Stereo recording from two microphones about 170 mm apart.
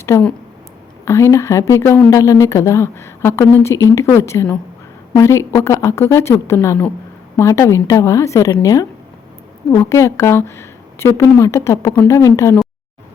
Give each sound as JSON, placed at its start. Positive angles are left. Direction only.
{"t": 0.0, "sound": "a woman's voice", "side_deg": 10}